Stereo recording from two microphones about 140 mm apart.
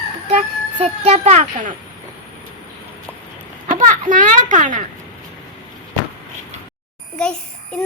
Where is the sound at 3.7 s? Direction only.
70° right (ahead or behind).